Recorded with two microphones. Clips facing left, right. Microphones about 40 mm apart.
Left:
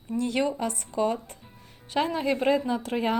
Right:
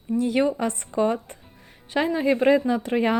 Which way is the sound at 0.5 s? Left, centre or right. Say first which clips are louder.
Right 4 dB; right.